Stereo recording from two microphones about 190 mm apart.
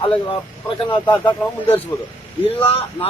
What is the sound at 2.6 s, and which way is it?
Speech, 30° left (ahead or behind).